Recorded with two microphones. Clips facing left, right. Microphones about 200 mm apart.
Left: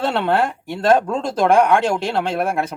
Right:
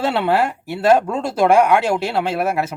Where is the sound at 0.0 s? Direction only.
5° right (ahead or behind).